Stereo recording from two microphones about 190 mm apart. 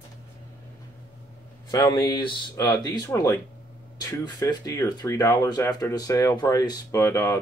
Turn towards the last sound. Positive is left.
turn(degrees=15)  # may be behind; listen again after turning